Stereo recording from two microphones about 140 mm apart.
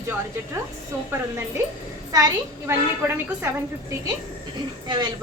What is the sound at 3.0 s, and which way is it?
Speech, 15° right (ahead or behind).